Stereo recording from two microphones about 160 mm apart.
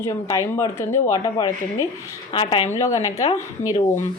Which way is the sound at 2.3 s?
30° left (ahead or behind).